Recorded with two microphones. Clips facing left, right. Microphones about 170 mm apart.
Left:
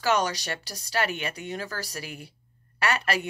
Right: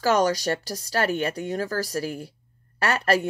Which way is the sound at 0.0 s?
45° right (ahead or behind).